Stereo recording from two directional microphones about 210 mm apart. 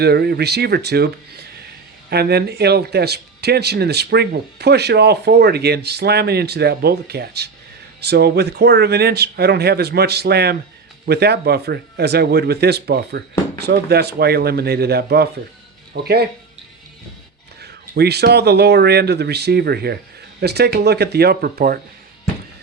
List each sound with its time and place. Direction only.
0.0 s speech: 50° right (ahead or behind)
17.6 s speech: 50° right (ahead or behind)